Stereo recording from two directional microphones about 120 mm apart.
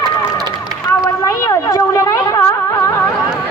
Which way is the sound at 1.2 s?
25° left (ahead or behind).